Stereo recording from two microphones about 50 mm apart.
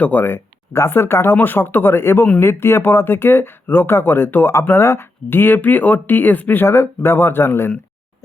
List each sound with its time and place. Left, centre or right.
0.0 s speech: left
0.3 s speech: left
6.7 s speech: left